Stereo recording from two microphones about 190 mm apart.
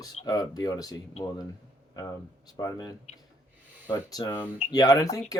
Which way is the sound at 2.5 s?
20° left (ahead or behind).